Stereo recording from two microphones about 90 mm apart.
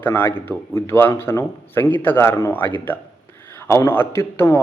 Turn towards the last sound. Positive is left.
turn(degrees=25)  # may be behind; listen again after turning